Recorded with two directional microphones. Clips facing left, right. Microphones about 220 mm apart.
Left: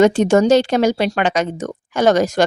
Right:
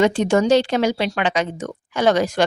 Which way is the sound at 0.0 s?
45° left (ahead or behind).